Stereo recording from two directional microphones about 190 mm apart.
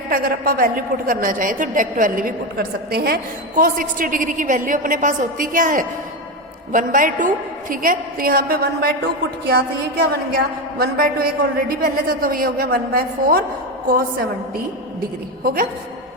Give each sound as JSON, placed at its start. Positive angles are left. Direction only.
{"t": 0.1, "sound": "a woman's voice", "side_deg": -50}